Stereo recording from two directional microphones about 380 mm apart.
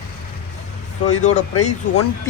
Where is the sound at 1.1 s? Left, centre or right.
Centre.